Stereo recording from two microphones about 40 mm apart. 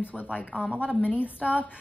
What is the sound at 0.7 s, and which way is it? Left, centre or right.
Speech, right.